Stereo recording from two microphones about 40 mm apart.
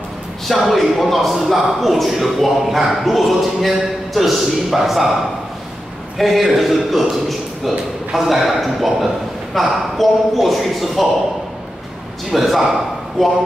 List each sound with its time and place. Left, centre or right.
0.6 s a man's voice: centre
6.1 s a man's voice: centre
12.3 s a man's voice: centre